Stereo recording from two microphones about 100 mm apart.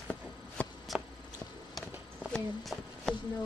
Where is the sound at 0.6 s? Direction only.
15° left (ahead or behind).